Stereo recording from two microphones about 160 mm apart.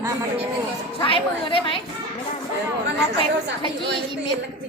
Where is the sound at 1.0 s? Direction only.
35° left (ahead or behind).